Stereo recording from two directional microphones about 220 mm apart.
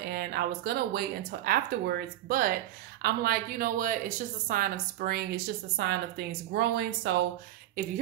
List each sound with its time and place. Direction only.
0.0 s a woman's voice: 45° right (ahead or behind)